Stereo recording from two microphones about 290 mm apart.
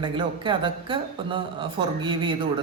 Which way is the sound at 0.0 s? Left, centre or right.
Centre.